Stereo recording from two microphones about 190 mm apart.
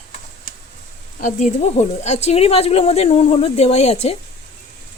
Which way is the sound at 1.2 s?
40° left (ahead or behind).